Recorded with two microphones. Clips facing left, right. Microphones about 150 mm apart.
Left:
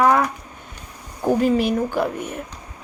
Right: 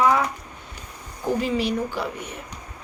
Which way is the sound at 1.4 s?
50° left (ahead or behind).